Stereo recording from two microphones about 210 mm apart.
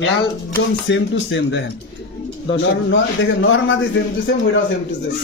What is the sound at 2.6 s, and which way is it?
A man's voice, 65° left (ahead or behind).